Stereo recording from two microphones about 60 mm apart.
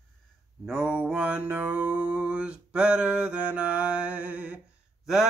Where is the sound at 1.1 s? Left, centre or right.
Right.